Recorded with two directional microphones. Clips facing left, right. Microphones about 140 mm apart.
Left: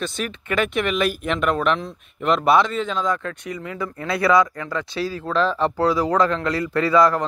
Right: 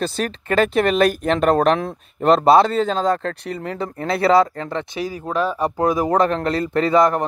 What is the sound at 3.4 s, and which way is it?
Speech, 60° right (ahead or behind).